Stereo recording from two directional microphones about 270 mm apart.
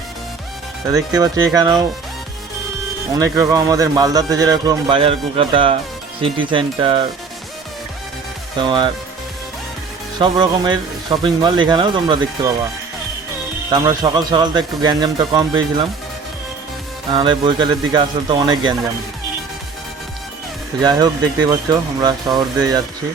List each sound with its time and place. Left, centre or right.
0.9 s speech: centre
3.1 s speech: centre
8.5 s speech: centre
10.2 s speech: centre
13.7 s speech: centre
17.1 s speech: centre
20.8 s speech: centre